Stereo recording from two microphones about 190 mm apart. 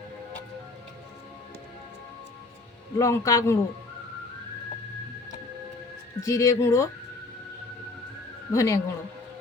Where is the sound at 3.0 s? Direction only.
15° left (ahead or behind).